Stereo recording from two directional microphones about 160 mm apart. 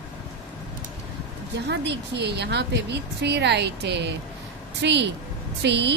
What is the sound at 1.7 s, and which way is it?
Speech, 90° right.